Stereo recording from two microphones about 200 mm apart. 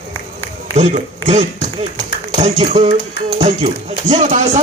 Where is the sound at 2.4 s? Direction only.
35° right (ahead or behind).